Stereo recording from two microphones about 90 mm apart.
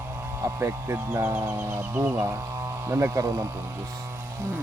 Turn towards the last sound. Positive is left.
turn(degrees=-35)  # may be behind; listen again after turning